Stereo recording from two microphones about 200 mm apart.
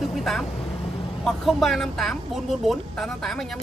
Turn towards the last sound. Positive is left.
turn(degrees=0)  # may be behind; listen again after turning